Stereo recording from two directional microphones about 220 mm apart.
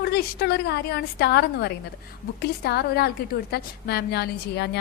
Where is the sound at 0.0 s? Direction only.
50° left (ahead or behind).